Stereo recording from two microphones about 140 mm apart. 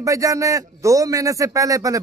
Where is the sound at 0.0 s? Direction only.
25° right (ahead or behind).